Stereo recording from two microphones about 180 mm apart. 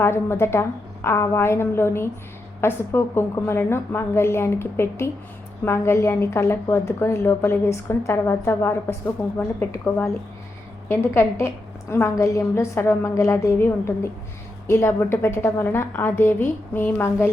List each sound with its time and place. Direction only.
0.0 s a woman's voice: 15° left (ahead or behind)